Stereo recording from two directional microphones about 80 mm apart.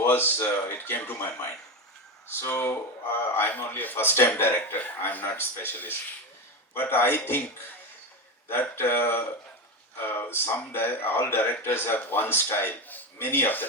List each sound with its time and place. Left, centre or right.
0.0 s a man's voice: left